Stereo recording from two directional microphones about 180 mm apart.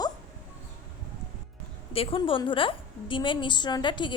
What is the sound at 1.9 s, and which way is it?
A woman's voice, 30° left (ahead or behind).